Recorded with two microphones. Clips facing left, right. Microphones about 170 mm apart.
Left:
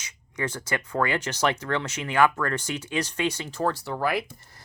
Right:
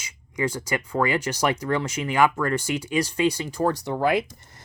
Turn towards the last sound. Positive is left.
turn(degrees=-20)  # may be behind; listen again after turning